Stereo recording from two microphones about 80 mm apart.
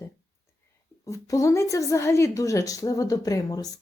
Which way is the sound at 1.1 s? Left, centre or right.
Left.